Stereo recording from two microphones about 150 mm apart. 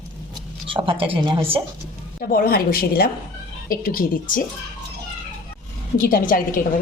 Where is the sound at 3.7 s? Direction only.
70° left (ahead or behind).